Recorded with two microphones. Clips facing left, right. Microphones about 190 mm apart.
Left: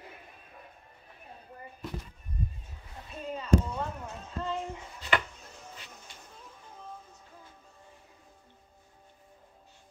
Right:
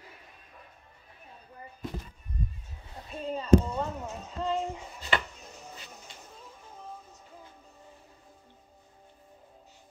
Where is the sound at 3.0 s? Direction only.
30° right (ahead or behind).